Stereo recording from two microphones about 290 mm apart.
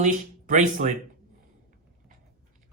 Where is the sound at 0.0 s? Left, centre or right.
Right.